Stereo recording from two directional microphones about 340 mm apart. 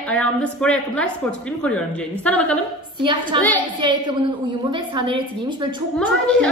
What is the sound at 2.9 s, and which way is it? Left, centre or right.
A woman's voice, centre.